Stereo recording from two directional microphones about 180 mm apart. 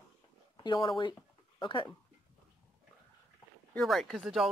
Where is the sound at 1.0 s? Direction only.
25° left (ahead or behind).